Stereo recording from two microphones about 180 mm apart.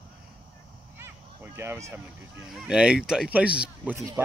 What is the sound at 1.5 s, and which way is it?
Speech, 15° right (ahead or behind).